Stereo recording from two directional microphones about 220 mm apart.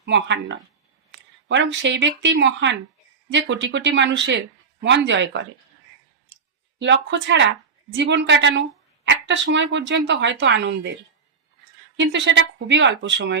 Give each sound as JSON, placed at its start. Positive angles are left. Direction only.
{"t": 0.0, "sound": "a woman's voice", "side_deg": -55}
{"t": 6.2, "sound": "clicking", "side_deg": -55}
{"t": 7.9, "sound": "a woman's voice", "side_deg": -55}
{"t": 11.9, "sound": "speech", "side_deg": -55}